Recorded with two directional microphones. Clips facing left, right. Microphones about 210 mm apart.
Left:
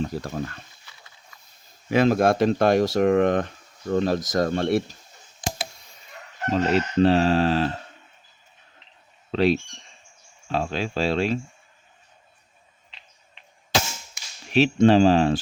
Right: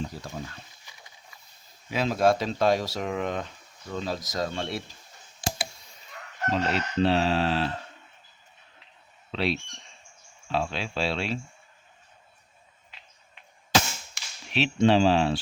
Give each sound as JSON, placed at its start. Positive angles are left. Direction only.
{"t": 0.0, "sound": "speech", "side_deg": 60}
{"t": 0.9, "sound": "a sound", "side_deg": -15}
{"t": 1.9, "sound": "speech", "side_deg": 55}
{"t": 6.5, "sound": "speech", "side_deg": 45}
{"t": 9.3, "sound": "speech", "side_deg": 45}
{"t": 14.5, "sound": "speech", "side_deg": 45}